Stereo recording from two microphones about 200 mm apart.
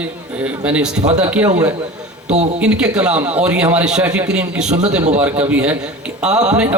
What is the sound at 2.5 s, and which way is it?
A man's voice, 5° right (ahead or behind).